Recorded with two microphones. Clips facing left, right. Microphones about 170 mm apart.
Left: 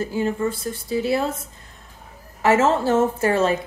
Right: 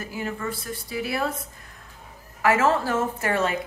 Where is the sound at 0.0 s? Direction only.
30° left (ahead or behind).